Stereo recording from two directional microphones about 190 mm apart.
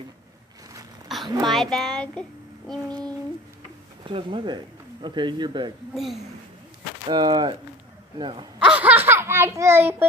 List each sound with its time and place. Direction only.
1.0 s a sound: centre (ahead or behind)
1.5 s speech: centre (ahead or behind)
4.0 s speech: 25° right (ahead or behind)
7.1 s speech: 20° right (ahead or behind)
8.5 s a child's voice: 5° right (ahead or behind)